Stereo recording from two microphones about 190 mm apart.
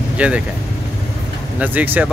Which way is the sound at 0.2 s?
5° right (ahead or behind).